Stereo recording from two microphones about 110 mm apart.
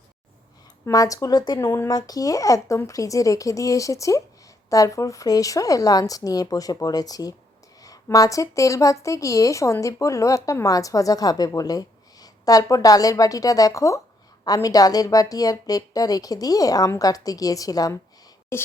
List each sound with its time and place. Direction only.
0.9 s a woman's voice: 30° left (ahead or behind)